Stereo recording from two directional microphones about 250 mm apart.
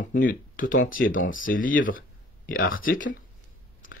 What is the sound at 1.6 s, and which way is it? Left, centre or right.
Speech, left.